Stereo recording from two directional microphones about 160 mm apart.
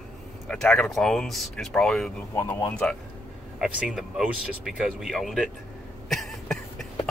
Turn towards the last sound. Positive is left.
turn(degrees=0)  # may be behind; listen again after turning